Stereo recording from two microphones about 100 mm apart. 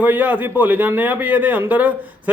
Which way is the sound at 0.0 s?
15° right (ahead or behind).